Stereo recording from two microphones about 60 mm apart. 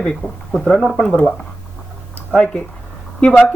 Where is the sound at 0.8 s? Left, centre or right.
Centre.